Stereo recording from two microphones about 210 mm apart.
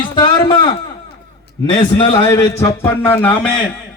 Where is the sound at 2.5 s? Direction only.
10° left (ahead or behind).